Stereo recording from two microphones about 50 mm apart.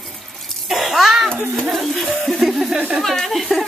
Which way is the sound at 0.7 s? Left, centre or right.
Centre.